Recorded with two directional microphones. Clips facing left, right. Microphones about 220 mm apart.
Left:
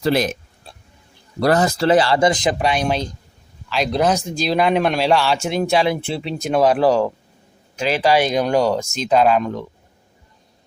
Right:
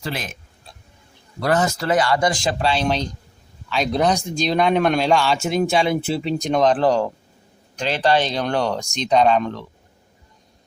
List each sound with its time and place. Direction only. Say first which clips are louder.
1.4 s speech: left 4 dB; 35° left (ahead or behind); by 9.6 s 10° left (ahead or behind)